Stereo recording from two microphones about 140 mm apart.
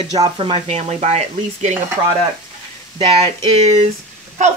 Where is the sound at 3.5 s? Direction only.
55° right (ahead or behind).